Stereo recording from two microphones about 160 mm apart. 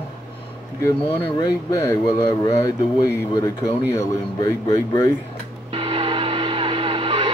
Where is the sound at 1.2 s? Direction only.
20° left (ahead or behind).